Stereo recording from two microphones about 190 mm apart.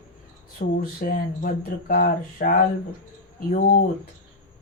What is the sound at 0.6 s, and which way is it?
Speech, 50° left (ahead or behind).